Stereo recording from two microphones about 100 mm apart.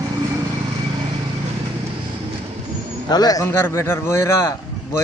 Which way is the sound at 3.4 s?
25° left (ahead or behind).